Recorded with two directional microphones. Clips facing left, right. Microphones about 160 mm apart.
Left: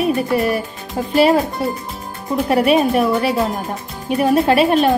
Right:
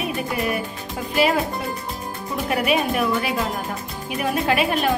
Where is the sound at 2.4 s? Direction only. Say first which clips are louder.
Left 7 dB; 35° left (ahead or behind).